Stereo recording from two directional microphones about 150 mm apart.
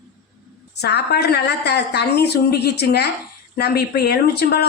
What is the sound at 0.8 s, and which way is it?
Speech, 90° left.